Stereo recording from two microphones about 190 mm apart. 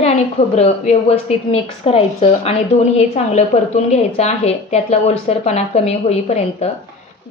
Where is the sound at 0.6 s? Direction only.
35° left (ahead or behind).